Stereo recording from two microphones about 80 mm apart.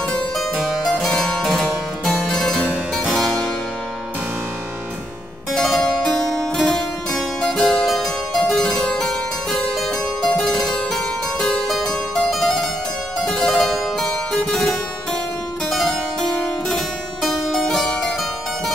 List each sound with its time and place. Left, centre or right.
0.4 s harpsichord: centre
0.9 s harpsichord: centre
1.4 s music: centre
3.0 s harpsichord: centre
5.5 s harpsichord: centre
7.5 s harpsichord: centre
7.8 s harpsichord: centre
15.7 s harpsichord: centre